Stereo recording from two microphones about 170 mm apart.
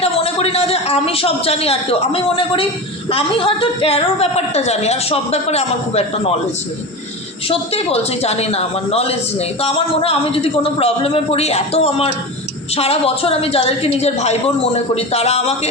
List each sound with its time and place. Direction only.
0.0 s a woman's voice: 35° left (ahead or behind)
7.4 s a woman's voice: 35° left (ahead or behind)